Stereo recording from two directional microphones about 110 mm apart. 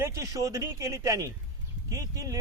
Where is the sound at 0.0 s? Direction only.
30° right (ahead or behind).